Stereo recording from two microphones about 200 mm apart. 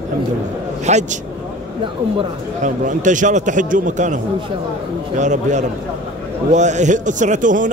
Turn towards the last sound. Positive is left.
turn(degrees=-40)  # may be behind; listen again after turning